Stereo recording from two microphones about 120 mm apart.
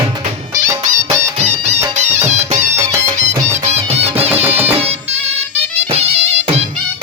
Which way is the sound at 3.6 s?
60° right (ahead or behind).